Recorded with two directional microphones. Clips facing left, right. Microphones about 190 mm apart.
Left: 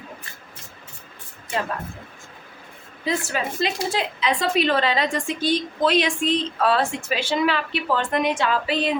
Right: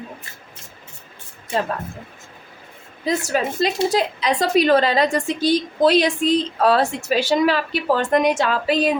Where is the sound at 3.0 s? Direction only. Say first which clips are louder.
Right 4 dB; 40° right (ahead or behind).